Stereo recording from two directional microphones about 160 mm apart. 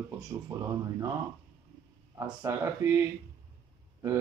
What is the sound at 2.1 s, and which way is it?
Speech, 20° right (ahead or behind).